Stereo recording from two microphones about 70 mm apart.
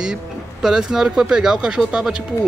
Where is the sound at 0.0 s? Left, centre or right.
Centre.